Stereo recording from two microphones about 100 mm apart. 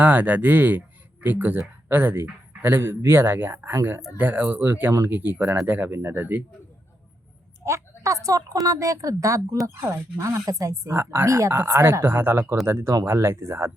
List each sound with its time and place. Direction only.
0.0 s speech: 15° right (ahead or behind)
7.6 s a woman's voice: 30° right (ahead or behind)